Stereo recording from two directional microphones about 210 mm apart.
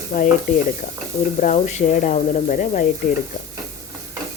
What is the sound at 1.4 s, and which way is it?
Speech, 35° left (ahead or behind).